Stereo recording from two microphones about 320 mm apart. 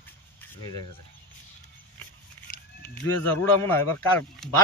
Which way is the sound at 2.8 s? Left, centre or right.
Centre.